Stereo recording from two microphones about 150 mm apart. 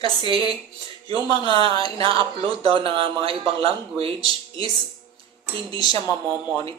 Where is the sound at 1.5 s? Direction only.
35° right (ahead or behind).